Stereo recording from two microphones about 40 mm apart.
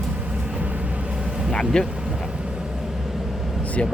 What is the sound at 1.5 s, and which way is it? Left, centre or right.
Speech, centre.